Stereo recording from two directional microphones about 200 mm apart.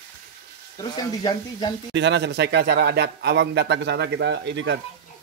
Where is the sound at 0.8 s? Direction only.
20° left (ahead or behind).